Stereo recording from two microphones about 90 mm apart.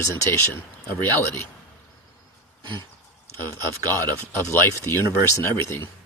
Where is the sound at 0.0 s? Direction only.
30° left (ahead or behind).